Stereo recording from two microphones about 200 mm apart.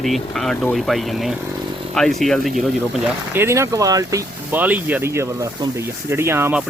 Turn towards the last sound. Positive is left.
turn(degrees=-10)  # may be behind; listen again after turning